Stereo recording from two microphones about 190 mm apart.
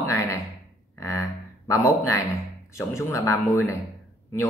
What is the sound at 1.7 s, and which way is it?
A man's voice, 15° left (ahead or behind).